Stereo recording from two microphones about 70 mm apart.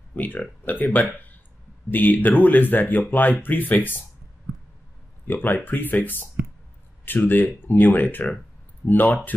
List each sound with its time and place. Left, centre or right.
0.1 s speech: left
5.2 s speech: left